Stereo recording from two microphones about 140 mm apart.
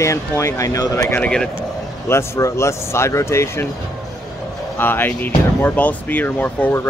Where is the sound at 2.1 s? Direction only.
20° left (ahead or behind).